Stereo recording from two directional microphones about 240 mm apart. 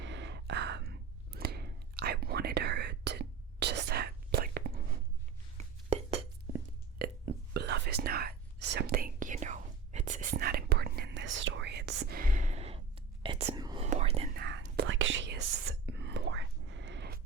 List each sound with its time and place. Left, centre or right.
0.0 s whispering: right
5.5 s a sound: right
6.5 s a sound: centre
7.0 s burping: right
7.5 s whispering: right
14.3 s whispering: right